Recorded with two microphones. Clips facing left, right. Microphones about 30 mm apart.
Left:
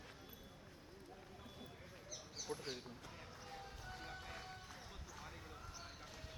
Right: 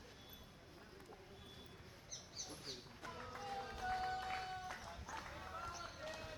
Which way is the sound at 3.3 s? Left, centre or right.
Right.